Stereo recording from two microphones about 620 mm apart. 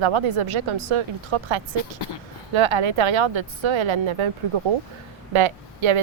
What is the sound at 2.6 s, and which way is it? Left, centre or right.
Speech, right.